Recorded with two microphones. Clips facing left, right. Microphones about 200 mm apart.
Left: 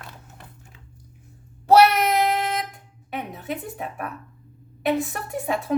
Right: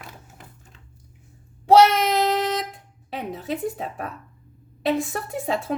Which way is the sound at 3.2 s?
30° right (ahead or behind).